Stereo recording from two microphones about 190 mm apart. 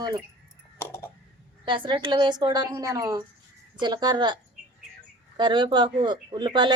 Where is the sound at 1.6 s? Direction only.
25° right (ahead or behind).